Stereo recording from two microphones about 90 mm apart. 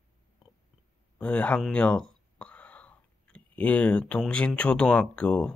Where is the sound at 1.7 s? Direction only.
10° left (ahead or behind).